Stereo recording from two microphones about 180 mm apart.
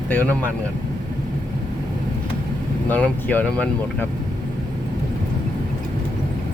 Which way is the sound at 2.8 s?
10° left (ahead or behind).